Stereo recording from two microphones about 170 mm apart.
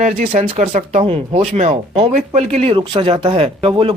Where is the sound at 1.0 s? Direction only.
30° right (ahead or behind).